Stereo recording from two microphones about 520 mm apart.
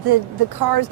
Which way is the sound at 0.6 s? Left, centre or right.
Right.